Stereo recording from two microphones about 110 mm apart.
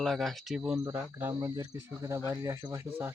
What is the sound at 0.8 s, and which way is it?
Speech, 20° right (ahead or behind).